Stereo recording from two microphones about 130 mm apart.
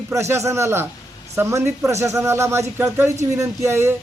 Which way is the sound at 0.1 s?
20° right (ahead or behind).